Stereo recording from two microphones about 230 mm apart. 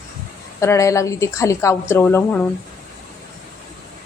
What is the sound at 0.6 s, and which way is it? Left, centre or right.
A woman's voice, centre.